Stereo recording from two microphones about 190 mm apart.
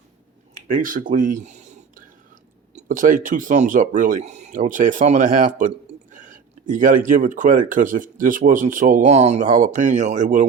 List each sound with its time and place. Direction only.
0.7 s speech: 45° right (ahead or behind)